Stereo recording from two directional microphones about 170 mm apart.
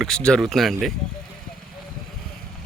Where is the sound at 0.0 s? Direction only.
5° left (ahead or behind).